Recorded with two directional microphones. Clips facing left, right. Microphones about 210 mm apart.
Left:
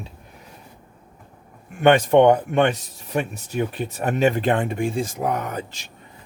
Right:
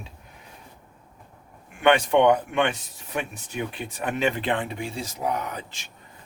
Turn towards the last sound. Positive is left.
turn(degrees=45)  # may be behind; listen again after turning